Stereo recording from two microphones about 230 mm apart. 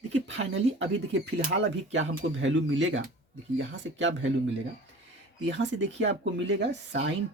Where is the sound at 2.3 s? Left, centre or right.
Right.